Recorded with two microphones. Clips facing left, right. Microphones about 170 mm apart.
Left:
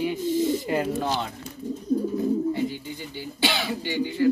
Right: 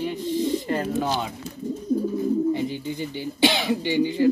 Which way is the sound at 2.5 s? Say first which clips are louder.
Right 2 dB; 20° right (ahead or behind).